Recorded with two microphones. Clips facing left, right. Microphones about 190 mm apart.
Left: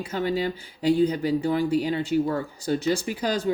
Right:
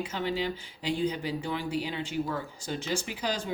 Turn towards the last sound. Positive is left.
turn(degrees=40)  # may be behind; listen again after turning